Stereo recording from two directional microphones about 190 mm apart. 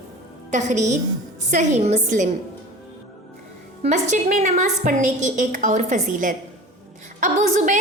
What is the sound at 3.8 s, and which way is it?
A woman's voice, 40° right (ahead or behind).